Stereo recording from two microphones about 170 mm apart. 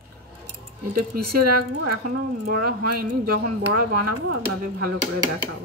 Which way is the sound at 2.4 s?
60° right (ahead or behind).